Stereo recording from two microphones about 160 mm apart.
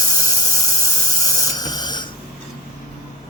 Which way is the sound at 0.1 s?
20° left (ahead or behind).